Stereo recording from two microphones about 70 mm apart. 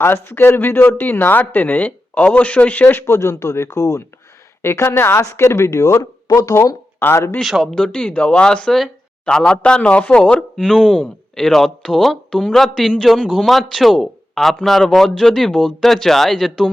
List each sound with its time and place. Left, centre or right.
0.0 s speech: left
3.2 s speech: left
4.6 s speech: left
7.0 s speech: left
7.4 s speech: centre
7.9 s speech: centre